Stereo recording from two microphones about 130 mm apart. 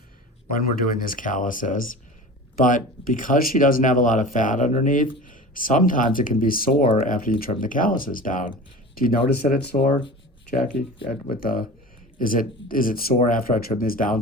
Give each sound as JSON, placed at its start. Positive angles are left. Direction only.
{"t": 0.7, "sound": "speech", "side_deg": 90}
{"t": 11.3, "sound": "speech", "side_deg": 90}